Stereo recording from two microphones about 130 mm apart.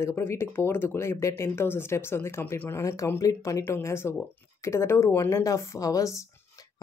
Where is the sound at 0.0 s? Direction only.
20° left (ahead or behind).